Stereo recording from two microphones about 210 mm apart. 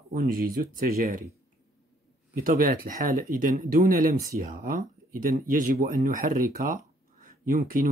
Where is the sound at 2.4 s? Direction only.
40° right (ahead or behind).